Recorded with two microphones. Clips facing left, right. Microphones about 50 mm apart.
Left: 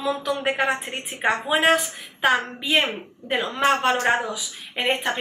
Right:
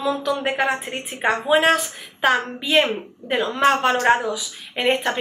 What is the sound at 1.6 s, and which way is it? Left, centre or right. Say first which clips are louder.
Speech: right 1 dB; centre.